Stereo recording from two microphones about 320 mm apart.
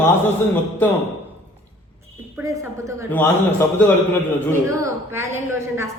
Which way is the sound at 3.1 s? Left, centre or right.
Centre.